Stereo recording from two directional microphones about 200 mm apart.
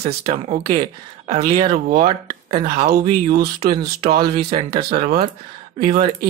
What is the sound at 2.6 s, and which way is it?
Speech, 50° right (ahead or behind).